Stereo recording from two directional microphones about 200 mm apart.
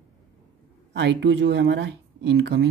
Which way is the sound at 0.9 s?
65° right (ahead or behind).